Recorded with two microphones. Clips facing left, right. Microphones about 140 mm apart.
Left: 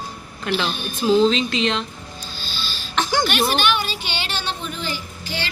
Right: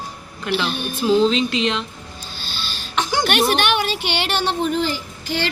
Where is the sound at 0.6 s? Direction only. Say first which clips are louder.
Right 2 dB; 60° right (ahead or behind).